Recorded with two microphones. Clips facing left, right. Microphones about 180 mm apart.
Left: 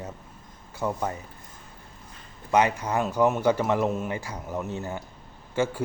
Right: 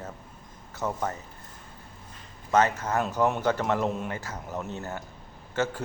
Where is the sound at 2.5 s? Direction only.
15° left (ahead or behind).